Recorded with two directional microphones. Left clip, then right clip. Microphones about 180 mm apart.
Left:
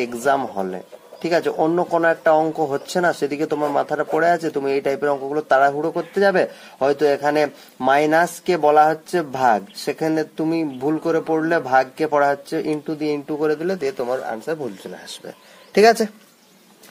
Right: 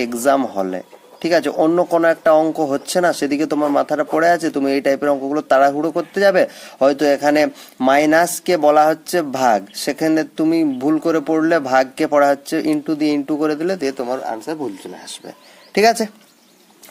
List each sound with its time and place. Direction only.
0.0 s speech: 30° right (ahead or behind); by 15.1 s 15° right (ahead or behind)
15.7 s speech: centre (ahead or behind)